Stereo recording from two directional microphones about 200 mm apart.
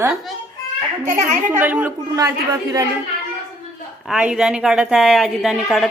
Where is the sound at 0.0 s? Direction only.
5° right (ahead or behind).